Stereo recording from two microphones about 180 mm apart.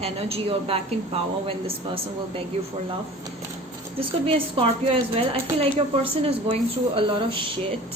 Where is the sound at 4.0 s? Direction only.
30° right (ahead or behind).